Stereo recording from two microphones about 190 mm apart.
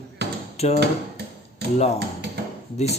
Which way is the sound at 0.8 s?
60° right (ahead or behind).